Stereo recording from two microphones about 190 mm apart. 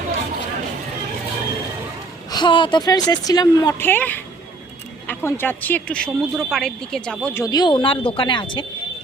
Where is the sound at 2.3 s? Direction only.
25° left (ahead or behind); by 7.4 s 5° left (ahead or behind).